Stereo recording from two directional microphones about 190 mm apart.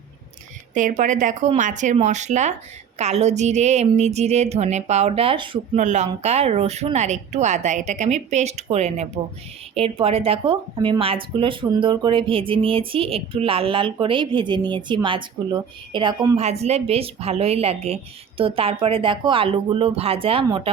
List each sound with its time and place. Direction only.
0.7 s a woman's voice: 40° right (ahead or behind)
5.8 s a woman's voice: 40° right (ahead or behind)